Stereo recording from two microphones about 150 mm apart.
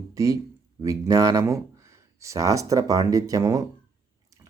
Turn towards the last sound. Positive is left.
turn(degrees=-25)  # may be behind; listen again after turning